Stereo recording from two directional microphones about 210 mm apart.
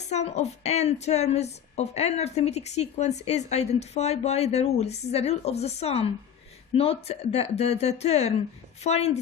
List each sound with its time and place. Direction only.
0.1 s a woman's voice: 30° left (ahead or behind)